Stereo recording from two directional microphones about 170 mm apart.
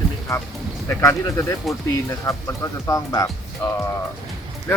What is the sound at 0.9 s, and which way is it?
Speech, 15° left (ahead or behind).